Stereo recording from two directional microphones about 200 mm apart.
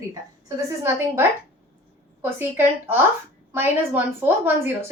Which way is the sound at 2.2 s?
10° right (ahead or behind).